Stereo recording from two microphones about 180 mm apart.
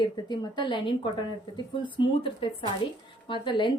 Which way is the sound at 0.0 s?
25° left (ahead or behind).